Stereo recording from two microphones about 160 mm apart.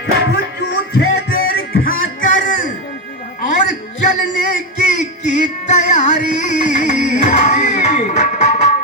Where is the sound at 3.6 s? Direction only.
50° left (ahead or behind).